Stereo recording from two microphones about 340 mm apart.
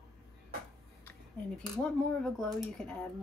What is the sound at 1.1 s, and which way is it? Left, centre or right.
Speech, centre.